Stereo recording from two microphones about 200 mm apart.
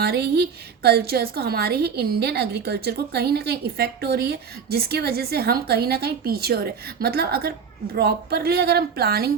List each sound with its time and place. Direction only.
0.0 s a woman's voice: 55° right (ahead or behind)